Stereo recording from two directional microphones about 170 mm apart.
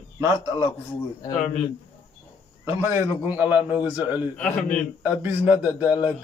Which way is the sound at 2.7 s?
15° right (ahead or behind).